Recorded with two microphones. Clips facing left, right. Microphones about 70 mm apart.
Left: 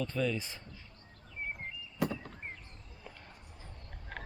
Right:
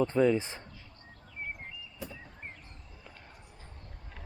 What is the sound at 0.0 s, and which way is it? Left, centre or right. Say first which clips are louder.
Speech: right 8 dB; right.